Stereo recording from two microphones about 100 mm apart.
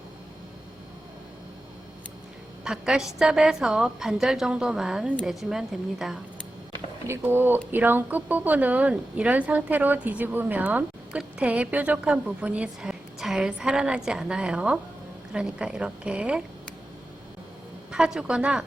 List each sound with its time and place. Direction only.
2.6 s a woman's voice: 5° right (ahead or behind)
7.1 s a woman's voice: 20° right (ahead or behind)
17.9 s a woman's voice: 5° right (ahead or behind)